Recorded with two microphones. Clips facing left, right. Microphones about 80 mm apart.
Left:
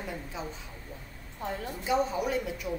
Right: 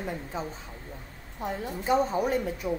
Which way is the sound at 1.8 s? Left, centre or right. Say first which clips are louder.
Right 3 dB; right.